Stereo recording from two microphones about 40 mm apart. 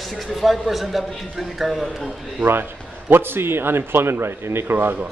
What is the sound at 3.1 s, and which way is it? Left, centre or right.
A man's voice, right.